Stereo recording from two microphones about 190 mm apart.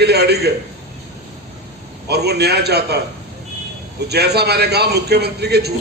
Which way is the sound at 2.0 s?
60° right (ahead or behind).